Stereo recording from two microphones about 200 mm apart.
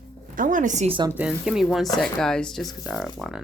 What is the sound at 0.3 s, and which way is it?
Speech, 40° right (ahead or behind).